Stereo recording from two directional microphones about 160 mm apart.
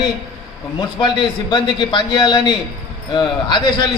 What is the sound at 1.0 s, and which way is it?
A man's voice, 30° left (ahead or behind).